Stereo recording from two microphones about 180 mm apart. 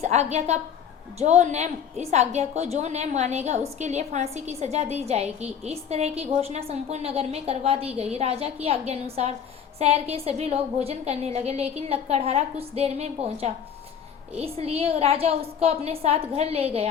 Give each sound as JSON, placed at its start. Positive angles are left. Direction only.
{"t": 0.0, "sound": "a woman's voice", "side_deg": -35}